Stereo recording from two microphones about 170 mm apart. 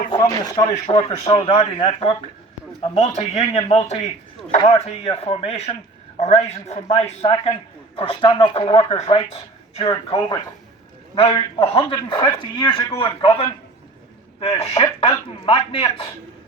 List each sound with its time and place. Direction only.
0.1 s a man's voice: 20° left (ahead or behind)
1.2 s a man's voice: 35° left (ahead or behind)